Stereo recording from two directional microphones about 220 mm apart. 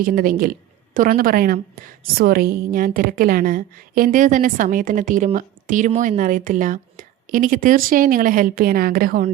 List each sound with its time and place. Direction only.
0.0 s a woman's voice: 40° right (ahead or behind)